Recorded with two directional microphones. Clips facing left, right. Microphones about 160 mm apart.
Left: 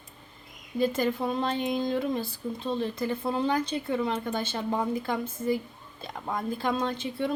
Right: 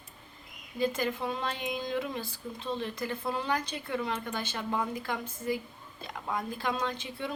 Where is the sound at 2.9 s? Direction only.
25° left (ahead or behind).